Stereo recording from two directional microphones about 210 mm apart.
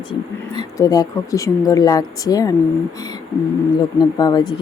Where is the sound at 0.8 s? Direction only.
15° left (ahead or behind).